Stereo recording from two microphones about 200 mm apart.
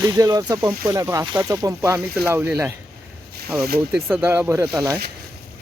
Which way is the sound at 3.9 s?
5° right (ahead or behind).